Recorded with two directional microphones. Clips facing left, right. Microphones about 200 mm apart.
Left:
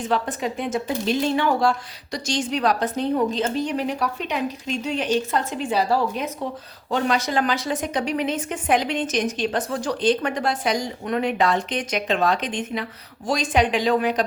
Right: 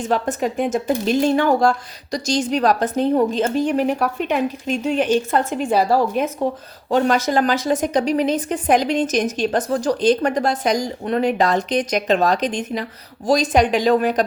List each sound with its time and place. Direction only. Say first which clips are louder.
0.0 s a woman's voice: right 4 dB; 45° right (ahead or behind)